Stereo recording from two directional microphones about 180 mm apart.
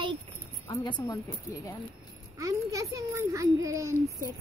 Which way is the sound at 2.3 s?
20° right (ahead or behind).